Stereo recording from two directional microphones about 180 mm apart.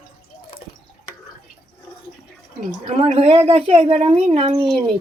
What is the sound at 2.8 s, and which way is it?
Speech, 35° right (ahead or behind).